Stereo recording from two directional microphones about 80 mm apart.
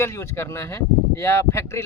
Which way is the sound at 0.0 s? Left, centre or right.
Left.